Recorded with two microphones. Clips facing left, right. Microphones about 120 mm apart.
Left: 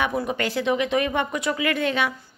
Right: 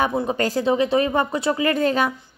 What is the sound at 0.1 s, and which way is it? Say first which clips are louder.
Speech: right 3 dB; 25° right (ahead or behind).